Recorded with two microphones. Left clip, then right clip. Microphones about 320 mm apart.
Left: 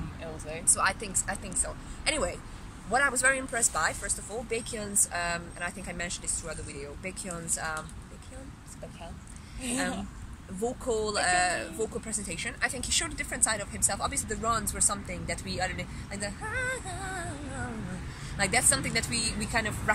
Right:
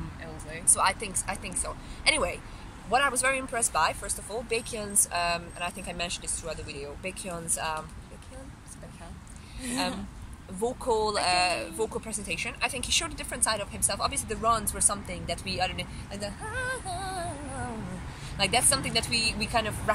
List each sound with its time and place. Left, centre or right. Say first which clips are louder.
0.7 s speech: right 2 dB; centre
9.6 s a woman's voice: left 1 dB; centre
10.8 s speech: right 3 dB; centre
18.4 s speech: right 1 dB; centre